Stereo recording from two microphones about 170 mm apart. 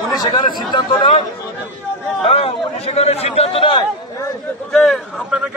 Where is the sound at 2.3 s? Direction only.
35° left (ahead or behind).